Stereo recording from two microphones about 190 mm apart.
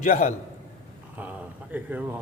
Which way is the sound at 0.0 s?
40° left (ahead or behind).